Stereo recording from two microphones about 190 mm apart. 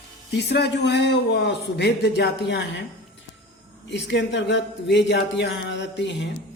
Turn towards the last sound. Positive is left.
turn(degrees=70)  # may be behind; listen again after turning